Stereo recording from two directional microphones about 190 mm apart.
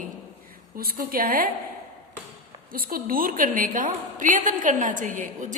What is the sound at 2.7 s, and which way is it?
A woman's voice, 50° right (ahead or behind).